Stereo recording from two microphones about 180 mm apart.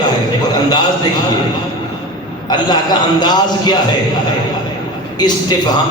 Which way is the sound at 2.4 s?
25° left (ahead or behind).